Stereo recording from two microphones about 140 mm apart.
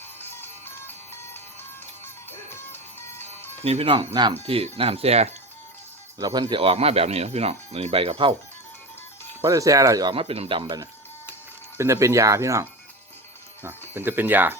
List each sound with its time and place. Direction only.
0.2 s music: 15° left (ahead or behind)
2.5 s music: 15° left (ahead or behind)
3.6 s speech: 45° right (ahead or behind)
4.4 s speech: 40° right (ahead or behind)
6.1 s speech: 25° right (ahead or behind)
6.6 s speech: 45° right (ahead or behind)
9.5 s speech: 25° right (ahead or behind)
11.8 s speech: 20° right (ahead or behind)